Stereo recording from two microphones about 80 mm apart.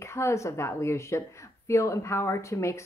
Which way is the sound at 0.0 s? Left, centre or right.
Left.